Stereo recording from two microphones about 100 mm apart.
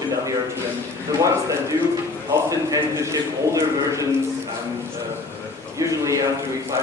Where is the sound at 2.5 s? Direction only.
35° right (ahead or behind).